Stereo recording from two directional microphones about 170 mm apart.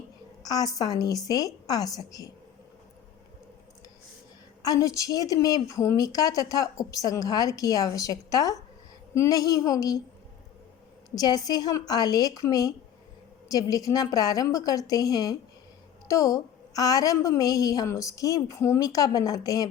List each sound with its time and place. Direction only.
0.4 s a woman's voice: 20° left (ahead or behind)
4.6 s a woman's voice: 20° left (ahead or behind)
11.1 s a woman's voice: 20° left (ahead or behind)